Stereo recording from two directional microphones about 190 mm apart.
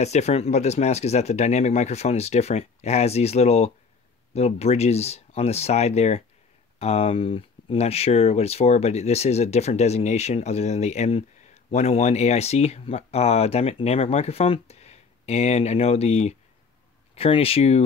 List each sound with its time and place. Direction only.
0.0 s speech: 35° left (ahead or behind)